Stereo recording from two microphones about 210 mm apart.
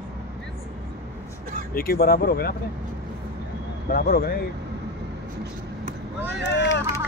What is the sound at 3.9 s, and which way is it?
Speech, 45° left (ahead or behind).